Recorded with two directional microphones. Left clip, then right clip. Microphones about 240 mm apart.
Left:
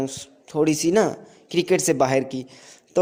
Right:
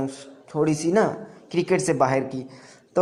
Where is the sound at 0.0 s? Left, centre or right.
Left.